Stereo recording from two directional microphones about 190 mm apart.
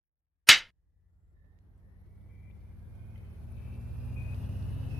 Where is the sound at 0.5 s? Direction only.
Centre (ahead or behind).